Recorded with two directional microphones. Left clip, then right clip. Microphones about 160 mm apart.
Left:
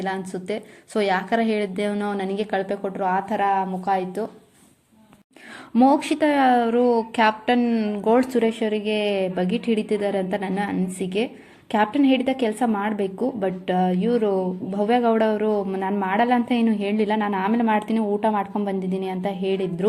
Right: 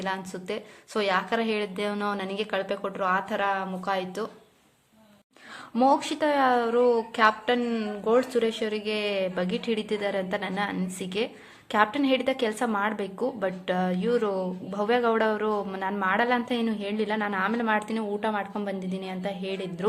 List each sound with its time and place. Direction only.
0.0 s a woman's voice: 15° left (ahead or behind)
5.7 s a woman's voice: 15° left (ahead or behind)
8.4 s a woman's voice: 5° left (ahead or behind)